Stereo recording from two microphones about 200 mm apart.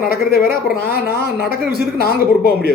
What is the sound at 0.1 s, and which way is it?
Speech, 50° left (ahead or behind).